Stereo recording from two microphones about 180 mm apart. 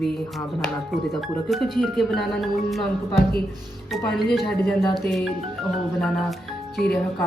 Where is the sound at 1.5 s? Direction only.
Centre (ahead or behind).